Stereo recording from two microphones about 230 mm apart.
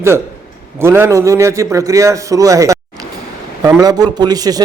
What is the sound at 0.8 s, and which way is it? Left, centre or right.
A man's voice, centre.